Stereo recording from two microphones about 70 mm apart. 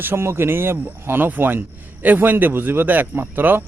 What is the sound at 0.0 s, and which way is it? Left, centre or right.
A man's voice, right.